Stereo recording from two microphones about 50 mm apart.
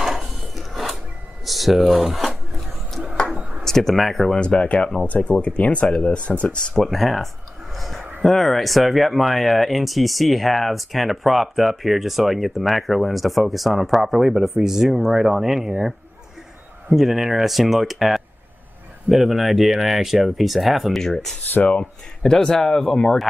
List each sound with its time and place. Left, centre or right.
0.0 s wood: centre
1.4 s speech: centre
3.3 s a sound: right
3.6 s speech: centre
4.4 s speech: left
6.7 s speech: centre
7.7 s a sound: centre
8.2 s speech: centre
16.9 s speech: centre